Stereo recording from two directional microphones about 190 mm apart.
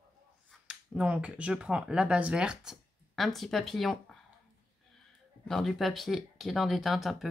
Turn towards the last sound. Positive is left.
turn(degrees=0)  # may be behind; listen again after turning